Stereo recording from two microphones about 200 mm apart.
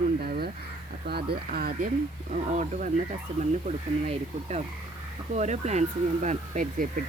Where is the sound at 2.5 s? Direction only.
35° right (ahead or behind).